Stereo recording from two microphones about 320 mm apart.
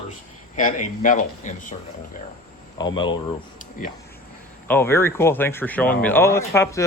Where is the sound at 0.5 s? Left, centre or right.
Left.